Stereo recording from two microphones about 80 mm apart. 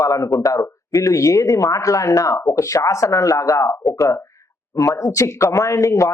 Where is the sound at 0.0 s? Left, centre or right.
Left.